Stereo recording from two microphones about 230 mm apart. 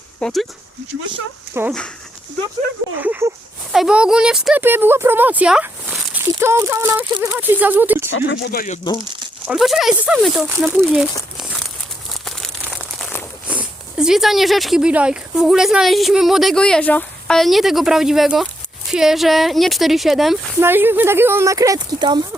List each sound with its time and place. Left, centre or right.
0.2 s speech: centre
1.5 s speech: centre
3.0 s speech: centre
8.3 s speech: left
9.5 s speech: centre
10.8 s crumpling: centre
13.5 s speech: centre